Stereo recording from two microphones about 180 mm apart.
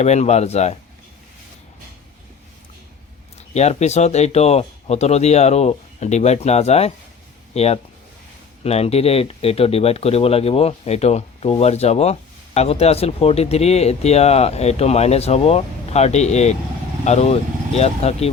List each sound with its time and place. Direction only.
0.0 s speech: 40° left (ahead or behind)
3.3 s speech: 35° left (ahead or behind)